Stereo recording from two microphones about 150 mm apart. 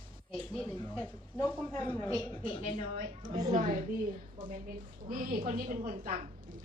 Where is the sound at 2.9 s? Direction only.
55° right (ahead or behind).